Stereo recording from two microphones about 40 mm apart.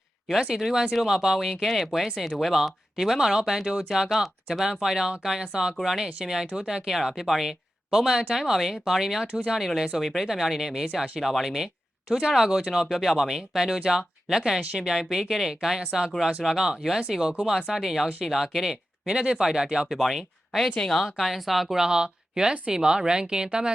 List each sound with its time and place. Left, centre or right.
0.3 s speech: centre
10.0 s speech: centre
19.0 s speech: centre
19.9 s speech: centre
21.8 s a woman's voice: centre